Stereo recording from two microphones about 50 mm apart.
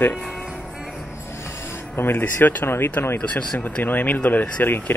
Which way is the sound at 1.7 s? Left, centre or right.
Left.